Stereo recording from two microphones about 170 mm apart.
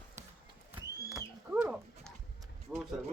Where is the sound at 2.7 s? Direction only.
5° right (ahead or behind).